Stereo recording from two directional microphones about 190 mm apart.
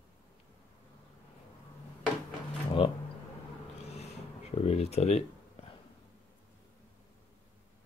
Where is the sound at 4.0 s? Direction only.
35° left (ahead or behind).